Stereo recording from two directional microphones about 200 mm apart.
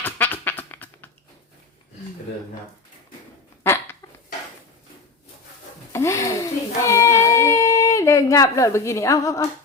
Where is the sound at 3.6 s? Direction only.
10° left (ahead or behind).